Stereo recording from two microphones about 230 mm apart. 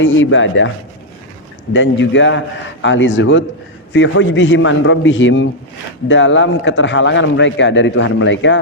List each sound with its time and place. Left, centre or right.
0.0 s a man's voice: left
1.7 s a man's voice: left